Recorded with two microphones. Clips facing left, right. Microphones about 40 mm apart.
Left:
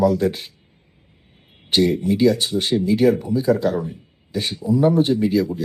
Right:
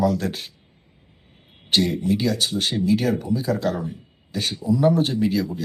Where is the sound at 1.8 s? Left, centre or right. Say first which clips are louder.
Left 7 dB; left.